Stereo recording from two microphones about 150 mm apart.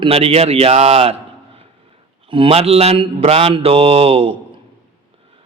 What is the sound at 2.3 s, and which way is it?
A man's voice, 40° right (ahead or behind).